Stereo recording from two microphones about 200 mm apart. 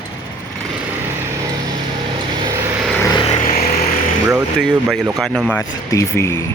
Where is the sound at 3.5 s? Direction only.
45° left (ahead or behind).